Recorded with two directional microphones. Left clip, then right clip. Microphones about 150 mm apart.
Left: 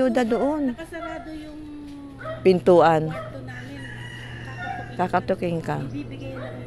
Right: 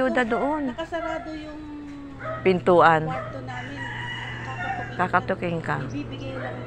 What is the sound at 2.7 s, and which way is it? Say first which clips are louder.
Speech: right 2 dB; 90° left.